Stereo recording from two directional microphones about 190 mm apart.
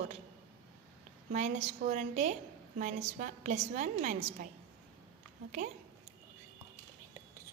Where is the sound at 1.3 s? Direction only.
40° right (ahead or behind).